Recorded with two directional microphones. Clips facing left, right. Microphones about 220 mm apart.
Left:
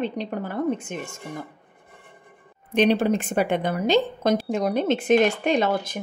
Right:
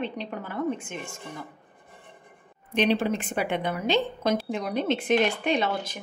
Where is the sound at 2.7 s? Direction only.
50° left (ahead or behind).